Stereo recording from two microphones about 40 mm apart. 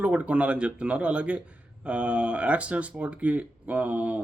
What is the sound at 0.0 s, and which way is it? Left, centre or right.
Speech, right.